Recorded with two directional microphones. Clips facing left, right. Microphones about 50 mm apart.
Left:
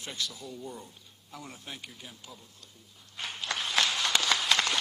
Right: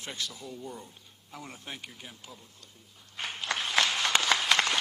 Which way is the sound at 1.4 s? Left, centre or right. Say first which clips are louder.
Right 1 dB; right.